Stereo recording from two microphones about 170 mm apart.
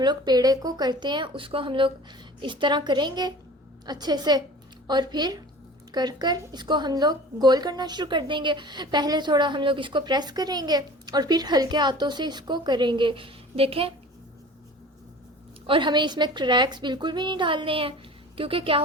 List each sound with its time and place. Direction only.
0.0 s speech: 25° right (ahead or behind)
15.6 s a woman's voice: 30° right (ahead or behind)